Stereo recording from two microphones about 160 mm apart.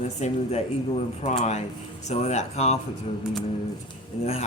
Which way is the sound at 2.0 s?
45° left (ahead or behind).